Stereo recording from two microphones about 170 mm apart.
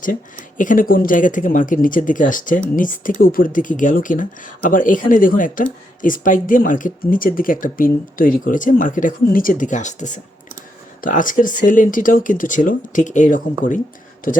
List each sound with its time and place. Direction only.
0.0 s a man's voice: 50° left (ahead or behind)